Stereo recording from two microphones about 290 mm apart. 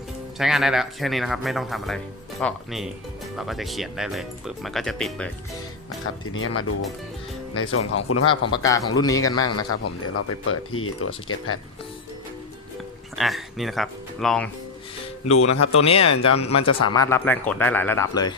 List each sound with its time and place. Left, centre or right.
0.3 s speech: centre
6.1 s speech: left
8.5 s speech: centre
9.4 s speech: left
13.1 s speech: centre
15.4 s speech: left
15.8 s speech: centre
16.0 s speech: left
16.3 s speech: left
16.9 s speech: centre